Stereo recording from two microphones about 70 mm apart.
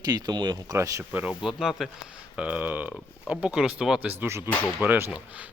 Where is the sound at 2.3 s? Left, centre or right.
Centre.